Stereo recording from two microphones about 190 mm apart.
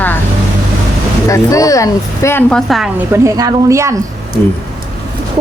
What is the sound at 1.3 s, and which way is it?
Speech, 15° left (ahead or behind).